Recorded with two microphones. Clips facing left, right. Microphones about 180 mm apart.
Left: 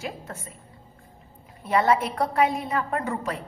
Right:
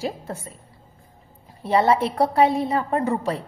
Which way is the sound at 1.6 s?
30° right (ahead or behind).